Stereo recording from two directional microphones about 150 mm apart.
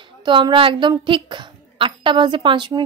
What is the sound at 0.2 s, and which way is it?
A woman's voice, 30° right (ahead or behind).